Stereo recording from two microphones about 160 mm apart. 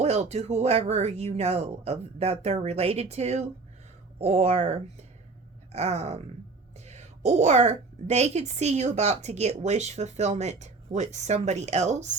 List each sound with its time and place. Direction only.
0.0 s a woman's voice: 45° right (ahead or behind)